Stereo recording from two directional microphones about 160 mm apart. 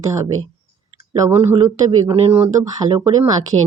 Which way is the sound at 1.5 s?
20° right (ahead or behind).